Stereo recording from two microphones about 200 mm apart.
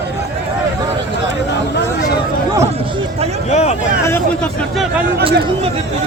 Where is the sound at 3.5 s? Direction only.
35° left (ahead or behind).